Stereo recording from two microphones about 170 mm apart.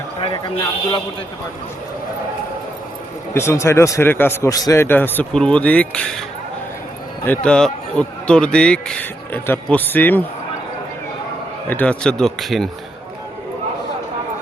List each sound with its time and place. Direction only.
0.2 s a man's voice: 30° left (ahead or behind)
3.3 s a man's voice: 15° left (ahead or behind)
7.3 s a man's voice: 5° left (ahead or behind)
11.7 s speech: 10° left (ahead or behind)